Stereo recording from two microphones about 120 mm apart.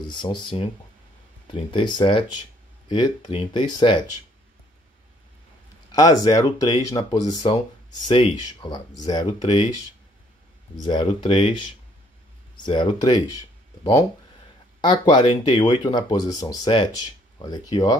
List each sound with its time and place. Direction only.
0.1 s speech: 40° left (ahead or behind)
1.5 s speech: 45° left (ahead or behind)
5.9 s speech: 30° left (ahead or behind)
7.4 s speech: 45° left (ahead or behind)
10.9 s speech: 40° left (ahead or behind)
14.8 s speech: 40° left (ahead or behind)